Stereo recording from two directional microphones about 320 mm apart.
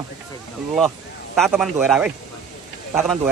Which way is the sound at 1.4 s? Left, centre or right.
Centre.